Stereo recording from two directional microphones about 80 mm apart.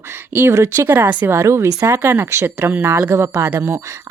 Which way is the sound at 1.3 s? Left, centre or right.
Right.